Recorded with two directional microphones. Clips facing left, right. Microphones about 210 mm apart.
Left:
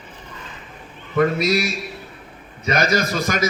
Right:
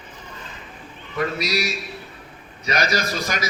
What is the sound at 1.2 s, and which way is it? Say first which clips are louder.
A man's voice: left 6 dB; 50° left (ahead or behind).